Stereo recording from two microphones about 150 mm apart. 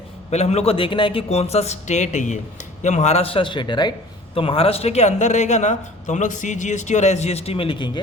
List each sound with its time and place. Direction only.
0.3 s speech: 45° left (ahead or behind)